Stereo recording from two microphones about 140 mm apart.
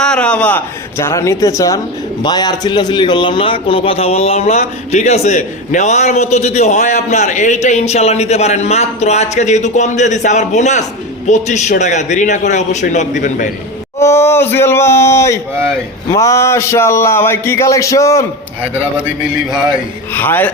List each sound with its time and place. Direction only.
0.0 s a man's voice: 5° left (ahead or behind); by 13.5 s 65° left (ahead or behind)
14.0 s a man's voice: 20° left (ahead or behind)
20.1 s speech: 15° left (ahead or behind)